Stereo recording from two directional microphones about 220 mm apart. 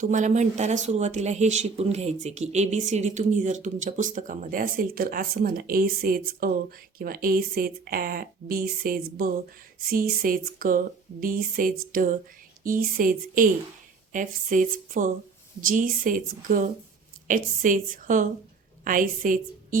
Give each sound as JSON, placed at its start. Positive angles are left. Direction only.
{"t": 0.0, "sound": "speech", "side_deg": -35}